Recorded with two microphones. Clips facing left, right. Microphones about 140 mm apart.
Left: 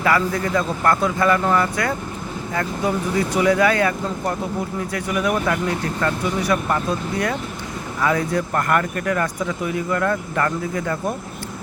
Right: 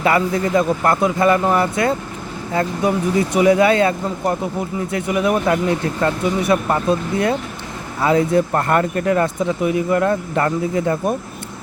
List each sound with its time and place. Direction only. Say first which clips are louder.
0.0 s speech: right 3 dB; 20° right (ahead or behind)